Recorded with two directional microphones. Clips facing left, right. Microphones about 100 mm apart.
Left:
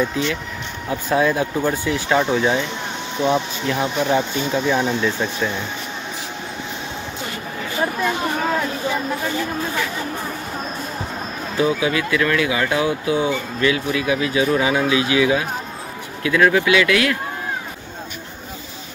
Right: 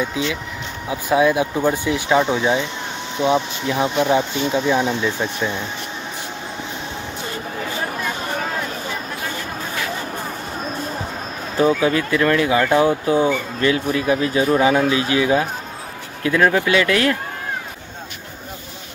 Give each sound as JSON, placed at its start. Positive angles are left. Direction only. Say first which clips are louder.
{"t": 0.0, "sound": "speech", "louder": "left 1 dB", "side_deg": -10}
{"t": 11.5, "sound": "speech", "louder": "right 3 dB", "side_deg": -40}